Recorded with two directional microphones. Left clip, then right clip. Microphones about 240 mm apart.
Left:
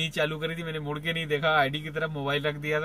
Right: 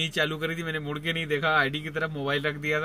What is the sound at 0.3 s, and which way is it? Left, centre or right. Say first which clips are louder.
Speech: right 2 dB; centre.